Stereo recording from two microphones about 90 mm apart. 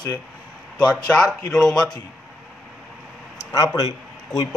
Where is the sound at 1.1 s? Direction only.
10° left (ahead or behind).